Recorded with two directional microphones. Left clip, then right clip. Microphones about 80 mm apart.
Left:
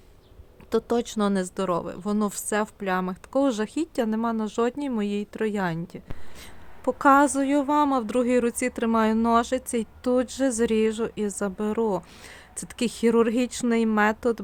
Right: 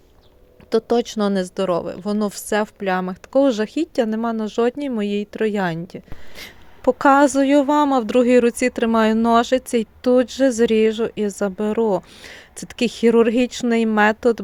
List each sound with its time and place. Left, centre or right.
0.7 s speech: right
6.3 s a woman's voice: right